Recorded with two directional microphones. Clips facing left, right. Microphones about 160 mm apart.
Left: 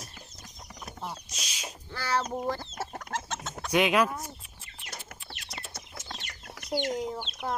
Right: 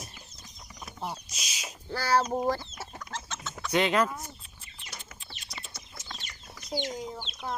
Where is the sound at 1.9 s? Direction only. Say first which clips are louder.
Right 4 dB; 40° right (ahead or behind).